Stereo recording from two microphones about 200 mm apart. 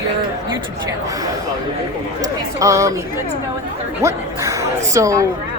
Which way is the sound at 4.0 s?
15° right (ahead or behind).